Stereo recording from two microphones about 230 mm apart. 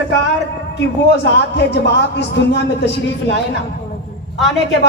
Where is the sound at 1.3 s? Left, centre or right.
Left.